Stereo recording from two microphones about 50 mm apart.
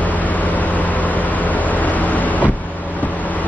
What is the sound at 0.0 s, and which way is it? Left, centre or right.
Vehicle, left.